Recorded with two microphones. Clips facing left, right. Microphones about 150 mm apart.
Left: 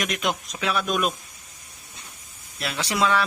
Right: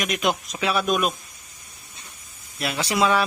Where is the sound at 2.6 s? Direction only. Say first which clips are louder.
Right 2 dB; 10° right (ahead or behind).